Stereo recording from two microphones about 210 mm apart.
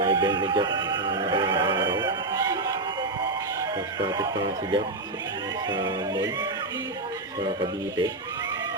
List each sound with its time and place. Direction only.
0.0 s a sound: 20° right (ahead or behind)
3.6 s speech: 20° right (ahead or behind)
7.6 s speech: 20° right (ahead or behind)